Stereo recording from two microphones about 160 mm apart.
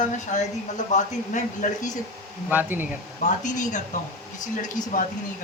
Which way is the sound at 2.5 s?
10° right (ahead or behind).